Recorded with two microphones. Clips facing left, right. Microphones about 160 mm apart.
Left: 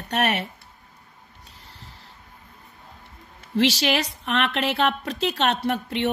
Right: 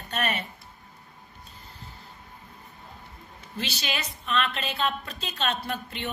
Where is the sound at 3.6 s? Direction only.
80° left.